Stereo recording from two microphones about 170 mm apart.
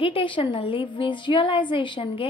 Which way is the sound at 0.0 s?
30° left (ahead or behind).